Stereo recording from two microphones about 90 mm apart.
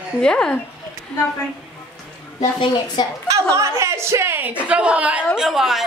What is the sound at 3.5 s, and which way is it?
A woman's voice, 35° right (ahead or behind).